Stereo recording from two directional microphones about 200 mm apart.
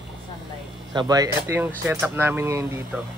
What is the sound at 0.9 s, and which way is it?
Speech, 20° right (ahead or behind).